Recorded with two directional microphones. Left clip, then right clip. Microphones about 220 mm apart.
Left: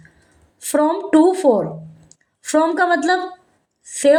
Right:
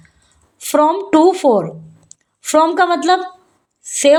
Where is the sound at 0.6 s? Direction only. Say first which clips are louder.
Right 4 dB; 35° right (ahead or behind).